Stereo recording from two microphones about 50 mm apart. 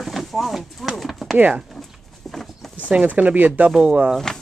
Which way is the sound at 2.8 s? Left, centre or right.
Right.